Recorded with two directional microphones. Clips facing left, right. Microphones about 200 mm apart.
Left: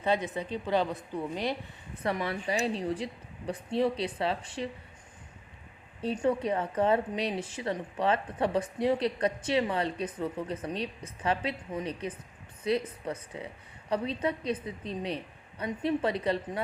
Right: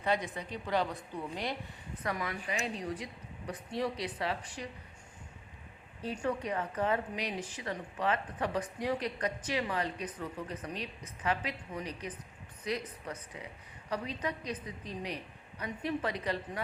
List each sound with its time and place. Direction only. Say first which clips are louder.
0.0 s a woman's voice: left 4 dB; 25° left (ahead or behind)
6.0 s a woman's voice: left 6 dB; 25° left (ahead or behind)